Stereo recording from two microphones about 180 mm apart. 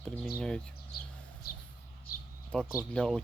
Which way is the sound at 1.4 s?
55° left (ahead or behind).